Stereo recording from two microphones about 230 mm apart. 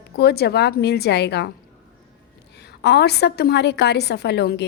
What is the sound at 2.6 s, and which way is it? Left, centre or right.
A woman's voice, left.